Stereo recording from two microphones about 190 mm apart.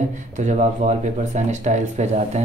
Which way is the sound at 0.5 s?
40° right (ahead or behind).